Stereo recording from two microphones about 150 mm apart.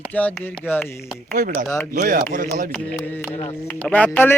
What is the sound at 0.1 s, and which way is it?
Speech, 10° left (ahead or behind).